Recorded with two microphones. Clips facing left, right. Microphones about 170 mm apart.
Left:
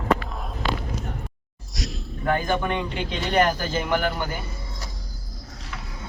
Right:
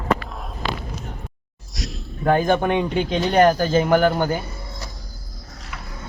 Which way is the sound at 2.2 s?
45° right (ahead or behind).